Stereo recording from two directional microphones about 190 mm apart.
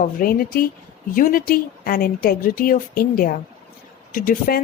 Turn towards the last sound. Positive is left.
turn(degrees=50)  # may be behind; listen again after turning